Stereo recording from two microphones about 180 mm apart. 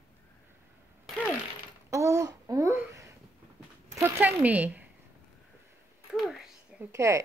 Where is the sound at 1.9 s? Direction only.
15° right (ahead or behind).